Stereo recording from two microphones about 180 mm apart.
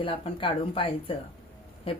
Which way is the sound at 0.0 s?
30° left (ahead or behind).